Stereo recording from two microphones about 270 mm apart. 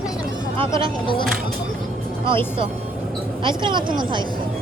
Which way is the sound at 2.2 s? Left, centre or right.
Centre.